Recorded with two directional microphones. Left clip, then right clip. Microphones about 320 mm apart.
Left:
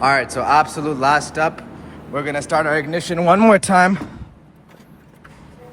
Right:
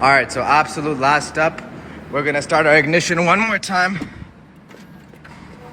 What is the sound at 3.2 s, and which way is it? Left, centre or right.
Speech, centre.